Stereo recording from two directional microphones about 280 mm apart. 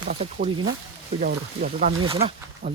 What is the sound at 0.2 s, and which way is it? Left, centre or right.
Speech, right.